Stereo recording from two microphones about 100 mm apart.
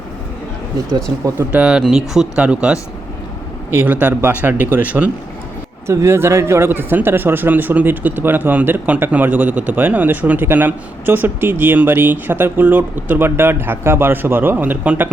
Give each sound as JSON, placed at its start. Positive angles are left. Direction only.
{"t": 1.4, "sound": "speech", "side_deg": -10}
{"t": 5.9, "sound": "speech", "side_deg": -30}